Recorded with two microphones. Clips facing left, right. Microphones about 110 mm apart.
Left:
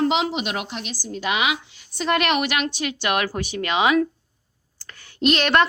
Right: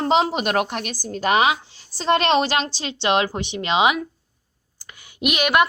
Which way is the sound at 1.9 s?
30° right (ahead or behind).